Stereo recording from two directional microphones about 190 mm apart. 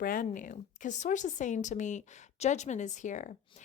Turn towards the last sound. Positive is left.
turn(degrees=40)  # may be behind; listen again after turning